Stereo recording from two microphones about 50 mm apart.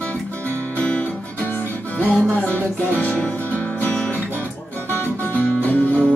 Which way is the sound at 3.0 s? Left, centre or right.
Left.